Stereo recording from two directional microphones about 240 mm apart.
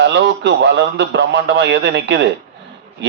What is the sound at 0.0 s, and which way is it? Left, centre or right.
A man's voice, right.